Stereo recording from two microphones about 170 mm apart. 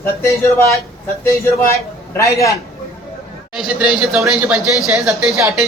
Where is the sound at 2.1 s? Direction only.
15° left (ahead or behind).